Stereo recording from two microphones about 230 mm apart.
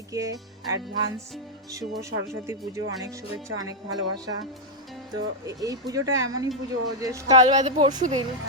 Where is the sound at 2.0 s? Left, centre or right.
Centre.